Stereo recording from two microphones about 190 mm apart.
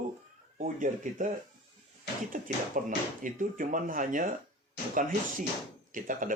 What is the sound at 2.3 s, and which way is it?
Speech, 50° right (ahead or behind).